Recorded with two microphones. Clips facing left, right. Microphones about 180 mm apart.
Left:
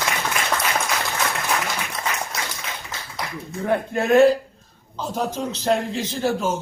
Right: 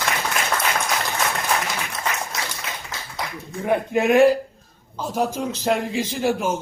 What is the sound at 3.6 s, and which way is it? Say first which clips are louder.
A man's voice: right 2 dB; 15° right (ahead or behind).